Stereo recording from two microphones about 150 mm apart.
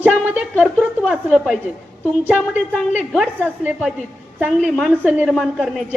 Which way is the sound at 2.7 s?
Centre (ahead or behind).